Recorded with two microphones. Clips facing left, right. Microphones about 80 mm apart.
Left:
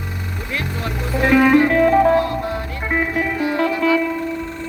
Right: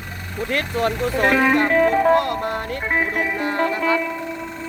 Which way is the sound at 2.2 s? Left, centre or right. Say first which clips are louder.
Left 1 dB; right.